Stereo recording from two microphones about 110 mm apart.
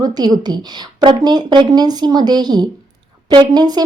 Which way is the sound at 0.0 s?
40° right (ahead or behind).